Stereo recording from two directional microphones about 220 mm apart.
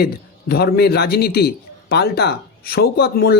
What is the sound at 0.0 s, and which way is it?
A man's voice, 45° left (ahead or behind).